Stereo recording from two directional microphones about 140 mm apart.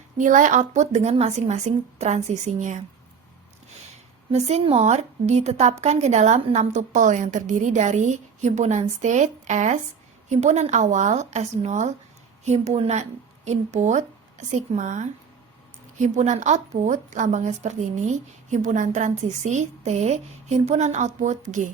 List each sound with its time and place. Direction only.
0.2 s a woman's voice: 65° right (ahead or behind)
4.3 s a woman's voice: 50° right (ahead or behind)